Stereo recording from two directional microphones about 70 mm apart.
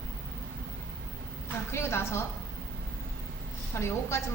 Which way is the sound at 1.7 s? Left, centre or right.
Left.